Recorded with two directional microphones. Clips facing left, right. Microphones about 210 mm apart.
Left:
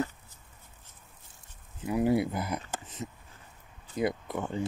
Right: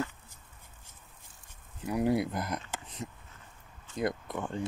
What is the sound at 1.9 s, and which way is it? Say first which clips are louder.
Speech: left 2 dB; centre (ahead or behind).